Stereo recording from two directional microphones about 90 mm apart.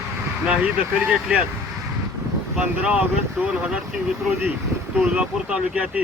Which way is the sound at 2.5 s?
10° right (ahead or behind).